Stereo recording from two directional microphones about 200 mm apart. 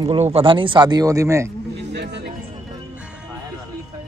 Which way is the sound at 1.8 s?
60° right (ahead or behind).